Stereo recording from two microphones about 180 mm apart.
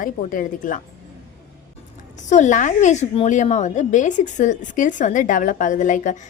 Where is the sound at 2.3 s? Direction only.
40° left (ahead or behind).